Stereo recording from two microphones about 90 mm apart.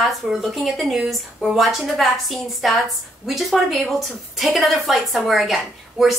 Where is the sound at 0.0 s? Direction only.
5° right (ahead or behind).